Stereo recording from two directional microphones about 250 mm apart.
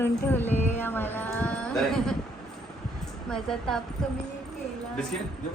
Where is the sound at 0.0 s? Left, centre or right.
Centre.